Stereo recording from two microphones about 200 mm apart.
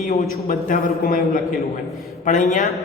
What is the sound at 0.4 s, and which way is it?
Speech, 45° left (ahead or behind).